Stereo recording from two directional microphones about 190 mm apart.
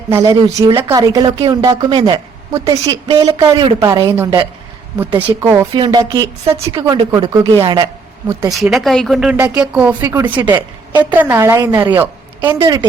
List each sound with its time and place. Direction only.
0.1 s a woman's voice: 15° right (ahead or behind)
8.5 s a woman's voice: centre (ahead or behind); by 12.8 s 15° right (ahead or behind)